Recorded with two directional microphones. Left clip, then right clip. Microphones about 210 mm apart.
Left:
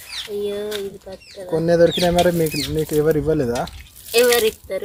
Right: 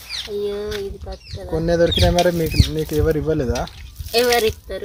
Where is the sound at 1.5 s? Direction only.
5° left (ahead or behind).